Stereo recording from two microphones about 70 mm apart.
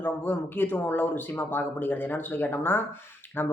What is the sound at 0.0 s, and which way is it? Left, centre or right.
Speech, left.